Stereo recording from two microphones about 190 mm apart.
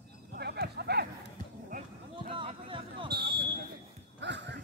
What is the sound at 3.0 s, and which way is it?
Basketball bounce, 55° right (ahead or behind).